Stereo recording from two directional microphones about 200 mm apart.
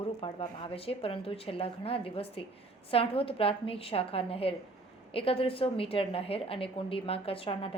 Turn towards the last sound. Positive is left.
turn(degrees=25)  # may be behind; listen again after turning